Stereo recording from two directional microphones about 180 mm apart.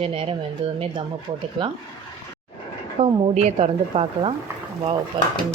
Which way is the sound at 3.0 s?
35° right (ahead or behind).